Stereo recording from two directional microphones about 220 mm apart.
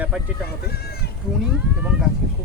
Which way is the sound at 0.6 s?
45° left (ahead or behind).